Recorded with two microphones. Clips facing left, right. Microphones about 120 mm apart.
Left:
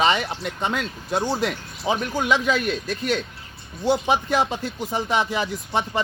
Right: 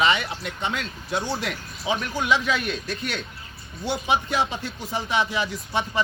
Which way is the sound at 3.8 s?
40° left (ahead or behind).